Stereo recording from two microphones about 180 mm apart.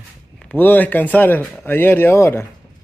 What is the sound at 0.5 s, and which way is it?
A man's voice, 10° left (ahead or behind).